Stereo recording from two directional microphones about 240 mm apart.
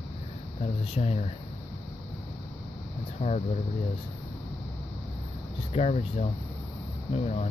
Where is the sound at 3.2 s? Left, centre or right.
Left.